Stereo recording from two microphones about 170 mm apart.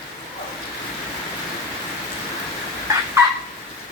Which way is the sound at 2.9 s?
20° right (ahead or behind).